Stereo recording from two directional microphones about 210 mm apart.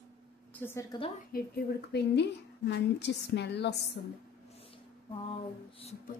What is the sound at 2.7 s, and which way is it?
A woman's voice, 55° left (ahead or behind).